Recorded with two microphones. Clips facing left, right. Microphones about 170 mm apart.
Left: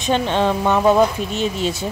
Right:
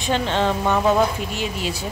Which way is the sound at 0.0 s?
15° left (ahead or behind).